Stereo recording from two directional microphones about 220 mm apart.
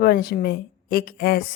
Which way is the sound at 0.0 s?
45° left (ahead or behind).